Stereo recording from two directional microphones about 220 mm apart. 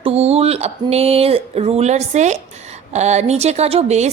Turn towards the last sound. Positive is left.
turn(degrees=-30)  # may be behind; listen again after turning